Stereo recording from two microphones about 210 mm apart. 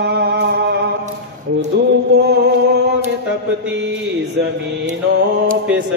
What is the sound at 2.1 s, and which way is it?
Music, 50° right (ahead or behind).